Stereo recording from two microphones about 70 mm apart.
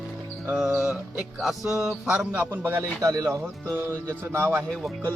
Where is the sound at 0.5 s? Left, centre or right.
Centre.